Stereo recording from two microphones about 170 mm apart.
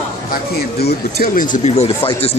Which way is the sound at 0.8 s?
60° left (ahead or behind).